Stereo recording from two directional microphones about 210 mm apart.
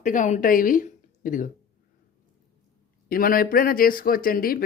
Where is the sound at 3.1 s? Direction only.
45° left (ahead or behind).